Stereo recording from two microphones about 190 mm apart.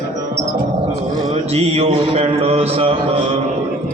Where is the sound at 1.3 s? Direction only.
35° right (ahead or behind).